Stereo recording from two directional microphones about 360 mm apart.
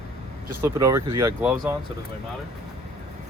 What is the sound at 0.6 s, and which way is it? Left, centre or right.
Speech, centre.